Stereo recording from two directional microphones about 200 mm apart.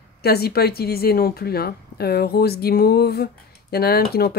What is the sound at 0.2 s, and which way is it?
Speech, 50° left (ahead or behind).